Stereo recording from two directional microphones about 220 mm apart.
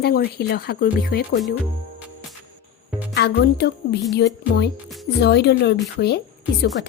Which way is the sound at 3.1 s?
50° left (ahead or behind).